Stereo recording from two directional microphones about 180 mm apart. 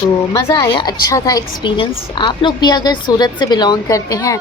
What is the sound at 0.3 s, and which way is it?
A woman's voice, 15° left (ahead or behind).